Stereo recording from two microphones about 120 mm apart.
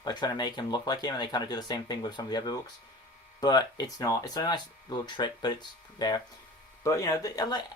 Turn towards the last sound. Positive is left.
turn(degrees=30)  # may be behind; listen again after turning